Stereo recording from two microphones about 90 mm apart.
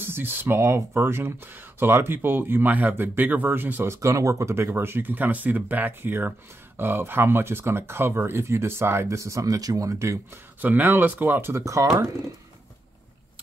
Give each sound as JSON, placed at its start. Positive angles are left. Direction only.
{"t": 0.0, "sound": "speech", "side_deg": -25}
{"t": 10.6, "sound": "speech", "side_deg": -20}
{"t": 11.5, "sound": "speech", "side_deg": -35}